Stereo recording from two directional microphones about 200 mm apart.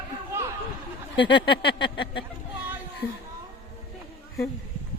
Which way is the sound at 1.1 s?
60° left (ahead or behind).